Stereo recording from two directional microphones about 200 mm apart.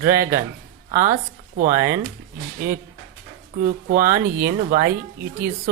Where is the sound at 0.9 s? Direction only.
40° right (ahead or behind).